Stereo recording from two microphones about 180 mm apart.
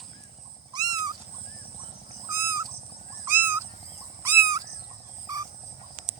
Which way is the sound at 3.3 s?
10° right (ahead or behind).